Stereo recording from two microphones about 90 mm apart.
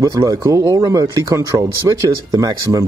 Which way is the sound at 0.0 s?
40° right (ahead or behind).